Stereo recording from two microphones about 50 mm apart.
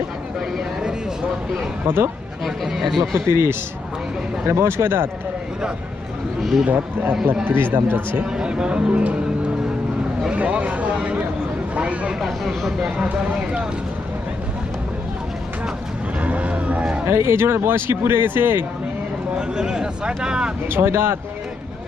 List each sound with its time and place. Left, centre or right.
2.4 s speech: centre
3.2 s a man's voice: right
6.7 s a man's voice: right
8.3 s speech: centre
12.2 s speech: centre
16.2 s music: right
17.1 s speech: right
19.4 s speech: centre
20.7 s speech: right